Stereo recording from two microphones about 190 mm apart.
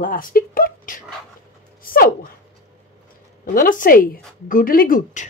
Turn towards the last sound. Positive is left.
turn(degrees=50)  # may be behind; listen again after turning